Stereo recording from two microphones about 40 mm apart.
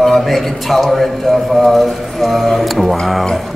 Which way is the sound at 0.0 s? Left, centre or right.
Centre.